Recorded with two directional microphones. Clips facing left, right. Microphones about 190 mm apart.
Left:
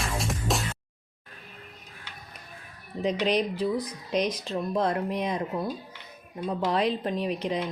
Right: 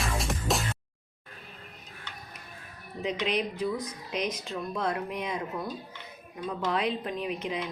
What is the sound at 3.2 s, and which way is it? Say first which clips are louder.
Speech: left 3 dB; 35° left (ahead or behind).